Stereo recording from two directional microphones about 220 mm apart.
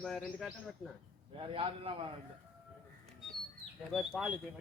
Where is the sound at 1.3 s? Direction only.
25° right (ahead or behind).